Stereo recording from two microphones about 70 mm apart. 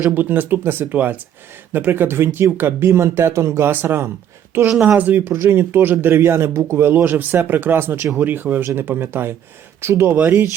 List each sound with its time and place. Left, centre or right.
0.1 s speech: right
4.8 s speech: right
6.6 s speech: right
6.8 s speech: right